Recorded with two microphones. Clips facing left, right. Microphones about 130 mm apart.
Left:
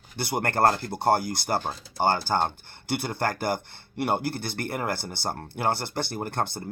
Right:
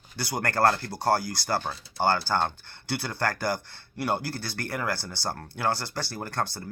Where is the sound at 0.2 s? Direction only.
25° left (ahead or behind).